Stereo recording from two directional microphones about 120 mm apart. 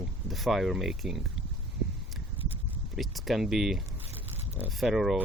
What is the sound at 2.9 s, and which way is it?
Speech, centre (ahead or behind).